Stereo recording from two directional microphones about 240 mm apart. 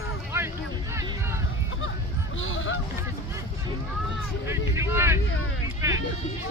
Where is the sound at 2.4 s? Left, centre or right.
Left.